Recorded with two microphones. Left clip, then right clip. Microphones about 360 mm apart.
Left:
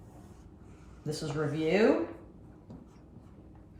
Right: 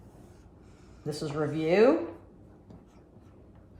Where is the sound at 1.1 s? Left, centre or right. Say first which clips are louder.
Right 2 dB; right.